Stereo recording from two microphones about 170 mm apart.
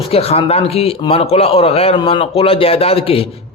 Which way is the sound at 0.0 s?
35° left (ahead or behind).